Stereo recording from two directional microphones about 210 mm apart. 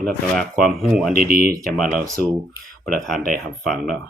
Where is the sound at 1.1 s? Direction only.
45° right (ahead or behind).